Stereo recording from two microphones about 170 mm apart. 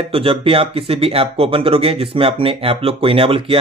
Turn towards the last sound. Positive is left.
turn(degrees=-30)  # may be behind; listen again after turning